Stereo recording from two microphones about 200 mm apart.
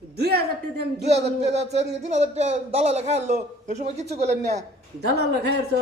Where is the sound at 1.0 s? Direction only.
30° right (ahead or behind).